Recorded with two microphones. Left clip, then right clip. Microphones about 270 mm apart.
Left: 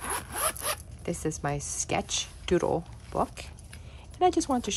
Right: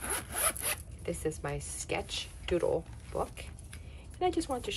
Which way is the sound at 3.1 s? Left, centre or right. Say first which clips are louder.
Left 6 dB; left.